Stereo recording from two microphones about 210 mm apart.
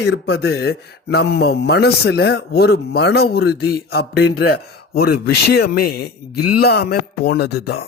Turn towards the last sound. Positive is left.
turn(degrees=50)  # may be behind; listen again after turning